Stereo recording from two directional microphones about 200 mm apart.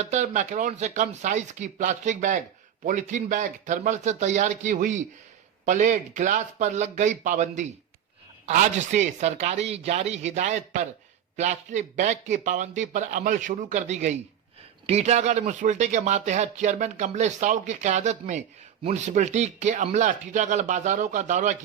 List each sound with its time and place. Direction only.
0.0 s speech: 35° right (ahead or behind)